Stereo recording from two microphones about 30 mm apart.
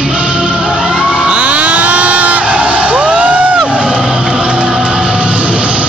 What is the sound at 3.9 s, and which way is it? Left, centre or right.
Music, right.